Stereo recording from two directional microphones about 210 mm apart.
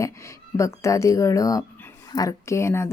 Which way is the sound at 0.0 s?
15° left (ahead or behind).